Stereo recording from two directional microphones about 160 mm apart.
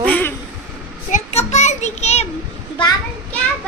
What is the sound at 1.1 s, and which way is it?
A child's voice, 45° left (ahead or behind).